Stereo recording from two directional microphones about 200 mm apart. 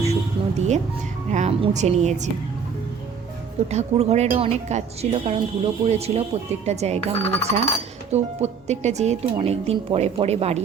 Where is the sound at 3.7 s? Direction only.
35° right (ahead or behind).